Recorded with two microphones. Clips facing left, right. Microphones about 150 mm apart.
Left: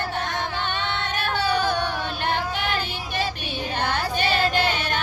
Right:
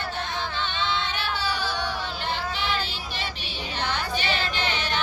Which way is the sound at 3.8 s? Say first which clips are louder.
Left 3 dB; 50° left (ahead or behind).